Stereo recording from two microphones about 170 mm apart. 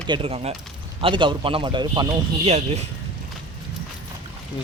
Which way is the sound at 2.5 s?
40° right (ahead or behind).